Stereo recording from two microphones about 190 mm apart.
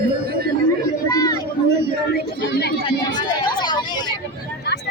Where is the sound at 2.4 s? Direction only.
60° left (ahead or behind).